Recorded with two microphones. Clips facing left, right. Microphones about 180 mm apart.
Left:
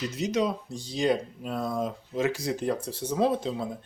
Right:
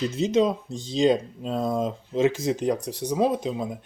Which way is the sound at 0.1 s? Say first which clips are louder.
Right 5 dB; 25° right (ahead or behind).